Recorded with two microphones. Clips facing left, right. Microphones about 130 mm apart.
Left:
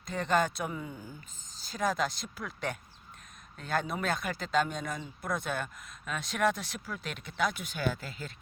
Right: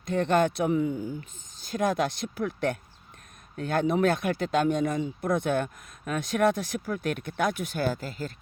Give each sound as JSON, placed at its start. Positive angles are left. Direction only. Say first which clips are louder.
{"t": 0.0, "sound": "speech", "louder": "right 5 dB", "side_deg": -55}
{"t": 1.6, "sound": "speech", "louder": "right 5 dB", "side_deg": -50}
{"t": 3.6, "sound": "speech", "louder": "right 9 dB", "side_deg": -55}